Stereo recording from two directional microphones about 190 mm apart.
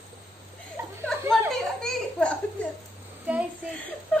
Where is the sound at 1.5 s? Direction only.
5° left (ahead or behind).